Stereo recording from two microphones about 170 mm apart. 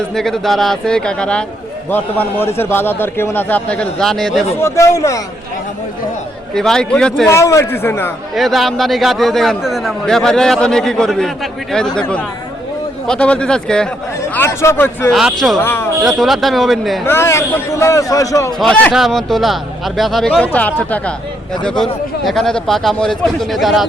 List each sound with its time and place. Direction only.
0.1 s a man's voice: centre (ahead or behind)
4.6 s a man's voice: 15° left (ahead or behind)
6.5 s a man's voice: 5° left (ahead or behind)
7.3 s a man's voice: 15° left (ahead or behind)
8.4 s a man's voice: centre (ahead or behind)
14.2 s a man's voice: 15° left (ahead or behind)
15.1 s a man's voice: centre (ahead or behind)
15.6 s a man's voice: 15° left (ahead or behind)
16.0 s a man's voice: centre (ahead or behind)
17.1 s a man's voice: 15° left (ahead or behind)
18.6 s a man's voice: 5° left (ahead or behind)